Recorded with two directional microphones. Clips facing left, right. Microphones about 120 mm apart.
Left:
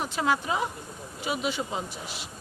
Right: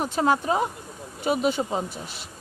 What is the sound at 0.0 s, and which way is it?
Speech, 40° right (ahead or behind).